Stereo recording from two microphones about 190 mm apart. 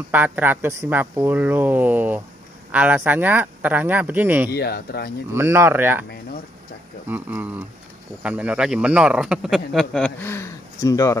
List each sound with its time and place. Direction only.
0.1 s speech: 10° right (ahead or behind)
4.5 s speech: 55° left (ahead or behind)
5.3 s speech: 15° right (ahead or behind)
7.1 s speech: 10° right (ahead or behind); by 11.1 s 15° left (ahead or behind)